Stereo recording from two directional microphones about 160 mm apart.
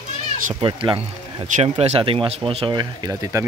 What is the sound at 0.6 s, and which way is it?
Speech, 30° right (ahead or behind).